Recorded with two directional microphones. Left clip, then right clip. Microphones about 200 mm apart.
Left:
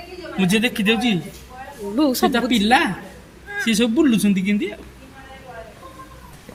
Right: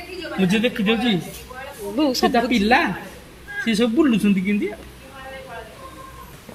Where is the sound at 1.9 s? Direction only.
20° left (ahead or behind).